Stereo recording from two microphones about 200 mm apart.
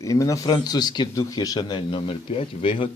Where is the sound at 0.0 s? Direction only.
15° left (ahead or behind).